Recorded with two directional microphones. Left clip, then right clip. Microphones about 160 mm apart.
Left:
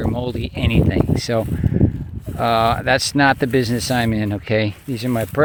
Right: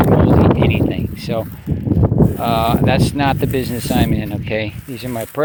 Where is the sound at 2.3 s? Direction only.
45° left (ahead or behind).